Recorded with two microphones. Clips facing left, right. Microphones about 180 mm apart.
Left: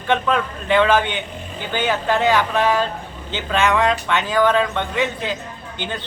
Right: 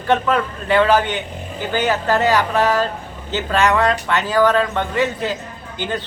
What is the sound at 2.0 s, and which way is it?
Speech, 5° right (ahead or behind).